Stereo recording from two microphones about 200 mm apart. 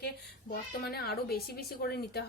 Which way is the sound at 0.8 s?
50° left (ahead or behind).